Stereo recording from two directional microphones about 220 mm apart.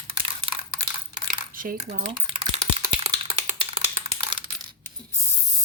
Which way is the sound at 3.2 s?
25° right (ahead or behind).